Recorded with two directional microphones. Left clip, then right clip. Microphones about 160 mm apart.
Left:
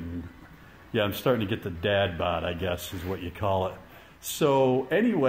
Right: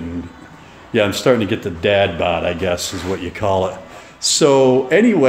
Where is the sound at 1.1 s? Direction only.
10° right (ahead or behind).